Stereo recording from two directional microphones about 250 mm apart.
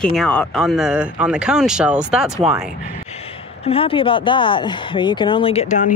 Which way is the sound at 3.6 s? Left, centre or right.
Left.